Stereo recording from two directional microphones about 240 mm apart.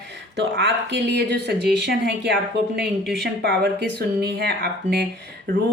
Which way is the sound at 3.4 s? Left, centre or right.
Right.